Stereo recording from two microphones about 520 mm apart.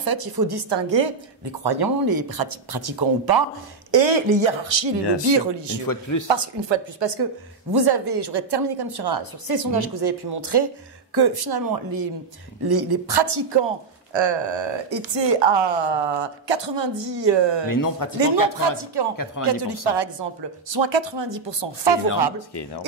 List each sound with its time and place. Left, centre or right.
0.0 s a woman's voice: right
3.9 s a woman's voice: right
5.9 s speech: left
6.2 s a woman's voice: right
17.6 s speech: left
18.6 s a woman's voice: right